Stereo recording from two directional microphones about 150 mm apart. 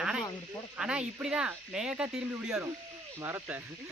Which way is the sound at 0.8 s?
5° right (ahead or behind).